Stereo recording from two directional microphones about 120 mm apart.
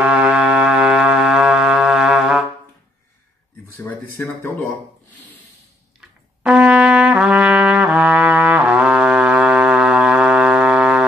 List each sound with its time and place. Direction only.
0.0 s music: 10° right (ahead or behind)
3.8 s speech: 25° left (ahead or behind)
5.9 s trumpet: 5° right (ahead or behind)